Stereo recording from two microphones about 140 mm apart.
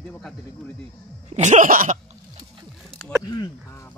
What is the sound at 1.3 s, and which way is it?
Throat clearing, 60° right (ahead or behind).